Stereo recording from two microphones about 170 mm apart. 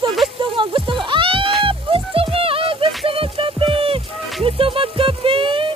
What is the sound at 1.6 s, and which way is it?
Music, 30° right (ahead or behind).